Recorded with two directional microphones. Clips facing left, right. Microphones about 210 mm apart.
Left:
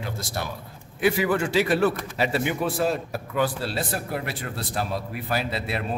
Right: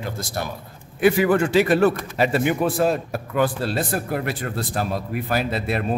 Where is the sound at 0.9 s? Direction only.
50° right (ahead or behind).